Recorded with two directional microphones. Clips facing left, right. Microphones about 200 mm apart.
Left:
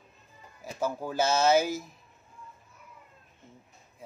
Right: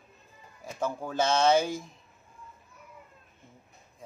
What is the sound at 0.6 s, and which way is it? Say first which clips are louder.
Speech: left 1 dB; 5° left (ahead or behind).